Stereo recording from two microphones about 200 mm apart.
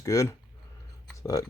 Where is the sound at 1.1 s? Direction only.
15° left (ahead or behind).